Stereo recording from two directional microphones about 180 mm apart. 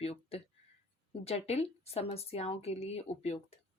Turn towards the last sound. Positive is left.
turn(degrees=35)  # may be behind; listen again after turning